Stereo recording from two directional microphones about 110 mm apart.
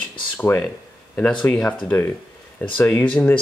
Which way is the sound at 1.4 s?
10° left (ahead or behind).